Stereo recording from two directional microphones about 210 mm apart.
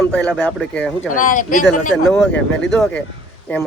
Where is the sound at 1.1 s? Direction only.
40° left (ahead or behind).